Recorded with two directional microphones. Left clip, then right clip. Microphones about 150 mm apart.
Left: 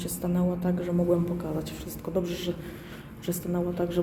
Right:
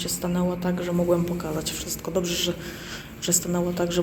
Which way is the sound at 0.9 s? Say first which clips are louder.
Right 3 dB; 5° right (ahead or behind).